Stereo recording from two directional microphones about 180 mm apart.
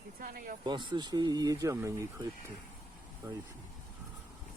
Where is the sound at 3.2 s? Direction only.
20° right (ahead or behind).